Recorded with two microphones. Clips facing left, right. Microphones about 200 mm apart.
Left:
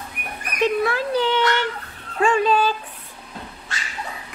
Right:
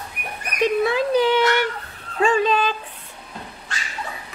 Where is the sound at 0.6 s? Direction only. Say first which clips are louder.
Right 1 dB; 15° right (ahead or behind).